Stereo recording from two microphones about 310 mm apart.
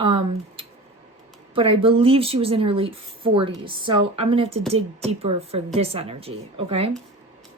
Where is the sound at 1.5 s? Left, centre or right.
Centre.